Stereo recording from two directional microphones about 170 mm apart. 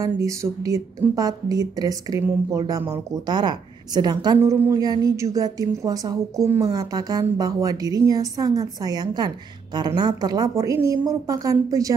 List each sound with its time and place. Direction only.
0.0 s a woman's voice: 20° right (ahead or behind)